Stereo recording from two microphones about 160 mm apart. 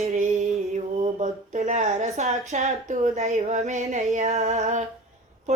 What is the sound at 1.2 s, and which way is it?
Speech, 50° right (ahead or behind).